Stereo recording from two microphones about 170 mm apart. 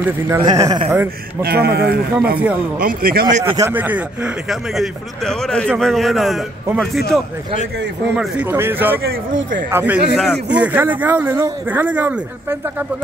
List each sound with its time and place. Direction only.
0.4 s speech: 25° right (ahead or behind)
1.4 s speech: 70° right (ahead or behind)
2.3 s speech: 10° right (ahead or behind)
2.8 s speech: 60° right (ahead or behind)
3.4 s a man's voice: 15° right (ahead or behind)
8.2 s speech: 10° right (ahead or behind)